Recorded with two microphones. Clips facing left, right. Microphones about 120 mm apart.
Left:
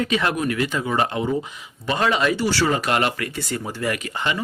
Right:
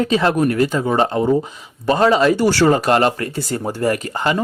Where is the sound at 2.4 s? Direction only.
50° right (ahead or behind).